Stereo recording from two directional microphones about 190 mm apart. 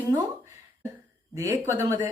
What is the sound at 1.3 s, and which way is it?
Speech, 15° right (ahead or behind).